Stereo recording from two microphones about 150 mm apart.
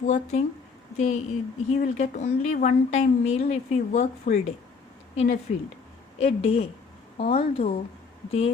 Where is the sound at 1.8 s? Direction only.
50° left (ahead or behind).